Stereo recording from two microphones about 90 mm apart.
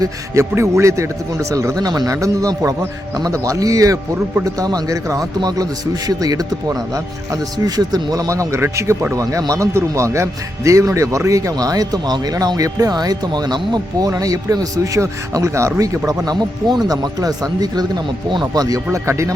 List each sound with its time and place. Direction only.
0.0 s speech: 30° right (ahead or behind)
18.9 s speech: 30° right (ahead or behind)